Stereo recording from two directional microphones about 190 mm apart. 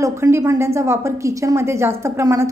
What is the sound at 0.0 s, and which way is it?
A woman's voice, 15° right (ahead or behind).